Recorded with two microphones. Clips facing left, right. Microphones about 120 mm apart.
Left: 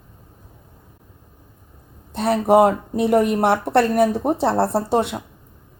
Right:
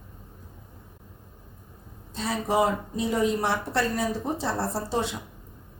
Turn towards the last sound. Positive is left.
turn(degrees=60)  # may be behind; listen again after turning